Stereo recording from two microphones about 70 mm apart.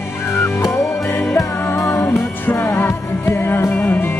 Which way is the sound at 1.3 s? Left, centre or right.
Left.